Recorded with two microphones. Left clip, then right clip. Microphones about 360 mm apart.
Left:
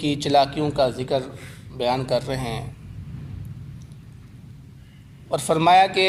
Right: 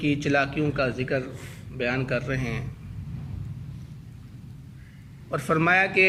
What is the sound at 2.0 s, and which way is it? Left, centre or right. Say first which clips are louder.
Speech: left 4 dB; centre.